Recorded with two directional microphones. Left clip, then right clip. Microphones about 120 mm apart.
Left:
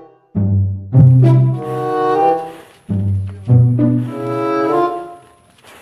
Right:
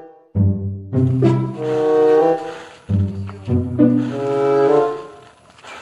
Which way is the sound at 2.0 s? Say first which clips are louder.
Left 1 dB; centre (ahead or behind).